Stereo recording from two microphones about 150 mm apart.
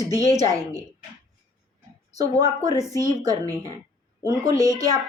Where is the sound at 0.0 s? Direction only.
25° right (ahead or behind).